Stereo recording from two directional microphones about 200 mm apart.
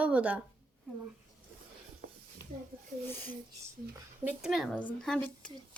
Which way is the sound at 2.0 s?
50° right (ahead or behind).